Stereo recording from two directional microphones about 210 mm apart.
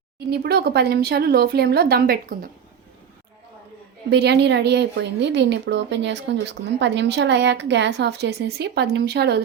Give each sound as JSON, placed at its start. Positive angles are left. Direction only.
{"t": 0.3, "sound": "speech", "side_deg": -50}
{"t": 4.1, "sound": "speech", "side_deg": -55}